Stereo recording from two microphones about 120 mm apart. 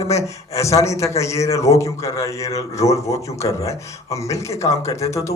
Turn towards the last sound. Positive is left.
turn(degrees=25)  # may be behind; listen again after turning